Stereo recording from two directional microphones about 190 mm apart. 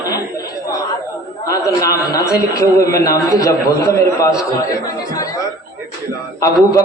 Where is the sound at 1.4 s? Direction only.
20° left (ahead or behind).